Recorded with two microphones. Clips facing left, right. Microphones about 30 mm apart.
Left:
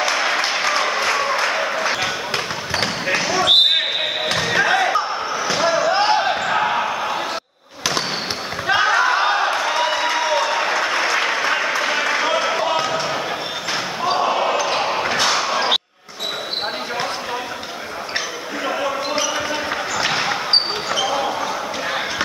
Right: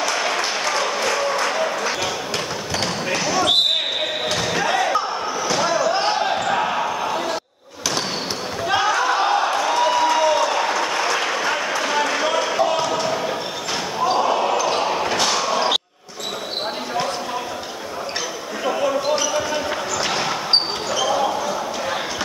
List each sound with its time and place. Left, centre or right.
0.0 s applause: left
4.3 s slam: left
8.6 s a sound: left
14.0 s basketball bounce: centre
18.8 s basketball bounce: centre